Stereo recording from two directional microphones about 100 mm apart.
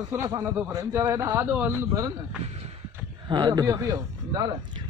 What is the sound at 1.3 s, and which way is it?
Speech, 15° right (ahead or behind).